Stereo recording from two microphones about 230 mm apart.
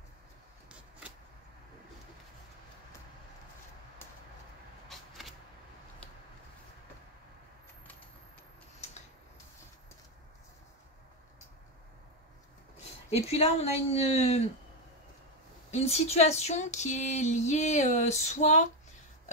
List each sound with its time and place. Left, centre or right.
0.7 s vehicle: centre
4.8 s vehicle: centre
13.1 s speech: left
15.7 s a sound: left